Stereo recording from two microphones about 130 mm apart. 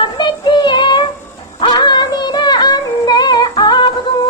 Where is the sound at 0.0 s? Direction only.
35° left (ahead or behind).